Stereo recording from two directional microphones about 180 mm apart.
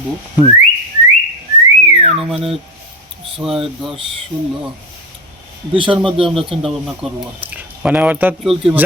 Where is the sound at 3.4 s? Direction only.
Centre (ahead or behind).